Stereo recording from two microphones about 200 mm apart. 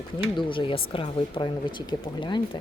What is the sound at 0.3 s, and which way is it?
Speech, 25° left (ahead or behind).